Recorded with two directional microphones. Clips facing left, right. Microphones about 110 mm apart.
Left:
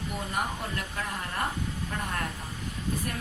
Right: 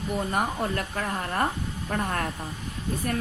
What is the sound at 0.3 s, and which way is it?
A woman's voice, 50° right (ahead or behind).